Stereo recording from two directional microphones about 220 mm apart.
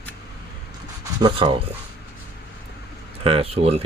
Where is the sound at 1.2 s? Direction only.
20° right (ahead or behind).